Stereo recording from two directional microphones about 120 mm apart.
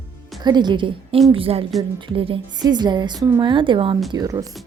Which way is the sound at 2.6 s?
35° right (ahead or behind).